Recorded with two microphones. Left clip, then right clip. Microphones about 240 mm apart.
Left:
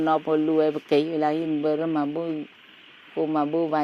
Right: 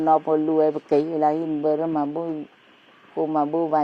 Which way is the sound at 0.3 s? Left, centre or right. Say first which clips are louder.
Right 2 dB; left.